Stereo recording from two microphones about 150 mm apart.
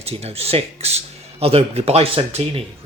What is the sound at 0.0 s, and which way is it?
Speech, 45° right (ahead or behind).